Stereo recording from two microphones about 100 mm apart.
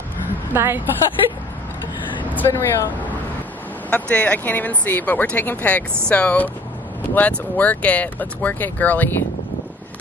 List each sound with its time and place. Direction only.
0.5 s a woman's voice: 20° right (ahead or behind)
2.2 s speech: 20° left (ahead or behind)
3.9 s speech: 15° left (ahead or behind)